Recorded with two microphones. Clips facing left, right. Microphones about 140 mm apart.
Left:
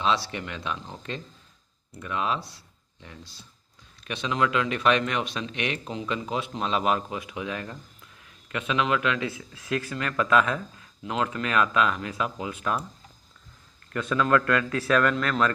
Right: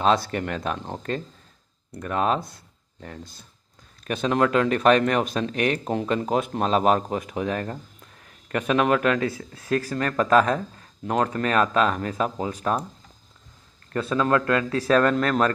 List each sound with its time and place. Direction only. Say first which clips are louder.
0.0 s speech: right 5 dB; 45° right (ahead or behind)
13.9 s speech: right 1 dB; 30° right (ahead or behind)